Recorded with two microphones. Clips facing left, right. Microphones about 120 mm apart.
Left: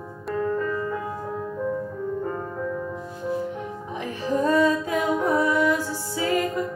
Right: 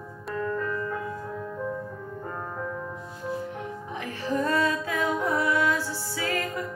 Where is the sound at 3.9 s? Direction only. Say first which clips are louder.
Left 4 dB; 15° left (ahead or behind).